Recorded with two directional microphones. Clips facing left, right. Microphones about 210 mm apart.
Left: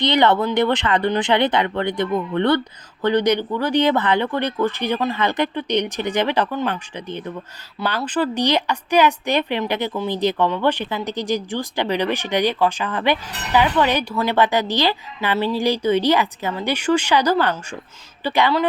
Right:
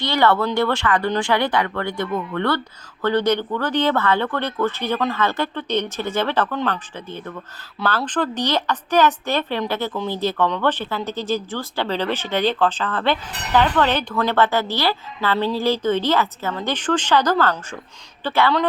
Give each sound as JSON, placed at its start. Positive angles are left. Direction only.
{"t": 0.0, "sound": "a woman's voice", "side_deg": 20}